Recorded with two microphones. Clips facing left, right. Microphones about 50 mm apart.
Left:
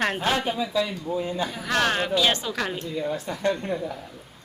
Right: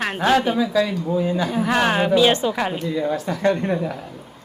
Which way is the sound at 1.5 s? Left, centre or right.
Centre.